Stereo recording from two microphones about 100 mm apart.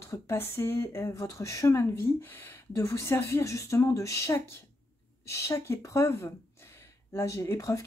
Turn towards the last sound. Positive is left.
turn(degrees=30)  # may be behind; listen again after turning